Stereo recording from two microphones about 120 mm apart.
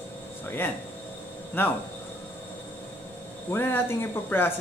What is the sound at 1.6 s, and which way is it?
Speech, 15° left (ahead or behind).